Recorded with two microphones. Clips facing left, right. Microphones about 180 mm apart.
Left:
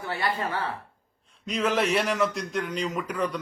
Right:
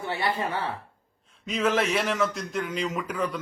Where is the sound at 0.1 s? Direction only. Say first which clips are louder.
Right 1 dB; 20° right (ahead or behind).